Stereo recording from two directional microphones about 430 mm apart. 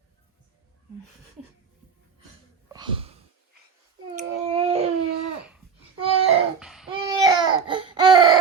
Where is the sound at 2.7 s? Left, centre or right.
Centre.